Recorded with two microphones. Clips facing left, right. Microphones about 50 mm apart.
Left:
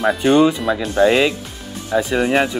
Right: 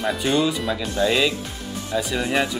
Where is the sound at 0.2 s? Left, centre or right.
Left.